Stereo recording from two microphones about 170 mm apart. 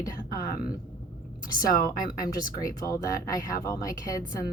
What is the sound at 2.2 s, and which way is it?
Speech, 20° left (ahead or behind).